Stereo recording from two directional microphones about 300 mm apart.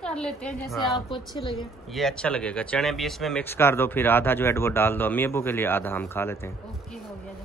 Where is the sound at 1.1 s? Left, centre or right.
Centre.